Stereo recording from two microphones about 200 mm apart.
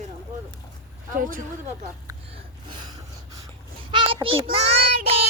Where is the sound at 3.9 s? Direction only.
25° right (ahead or behind).